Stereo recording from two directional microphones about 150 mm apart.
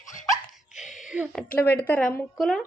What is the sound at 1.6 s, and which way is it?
Speech, 90° left.